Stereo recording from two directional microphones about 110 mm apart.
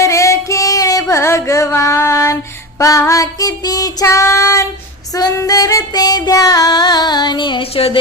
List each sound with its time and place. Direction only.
0.0 s music: 30° left (ahead or behind)
1.1 s female singing: 25° left (ahead or behind); by 7.9 s 50° left (ahead or behind)